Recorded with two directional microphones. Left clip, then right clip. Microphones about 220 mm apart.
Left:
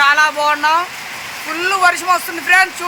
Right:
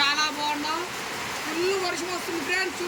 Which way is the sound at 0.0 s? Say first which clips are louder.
Left 12 dB; 5° right (ahead or behind).